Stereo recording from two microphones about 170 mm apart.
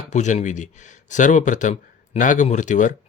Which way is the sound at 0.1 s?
45° left (ahead or behind).